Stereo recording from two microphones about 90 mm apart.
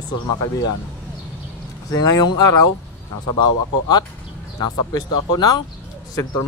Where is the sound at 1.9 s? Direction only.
40° left (ahead or behind).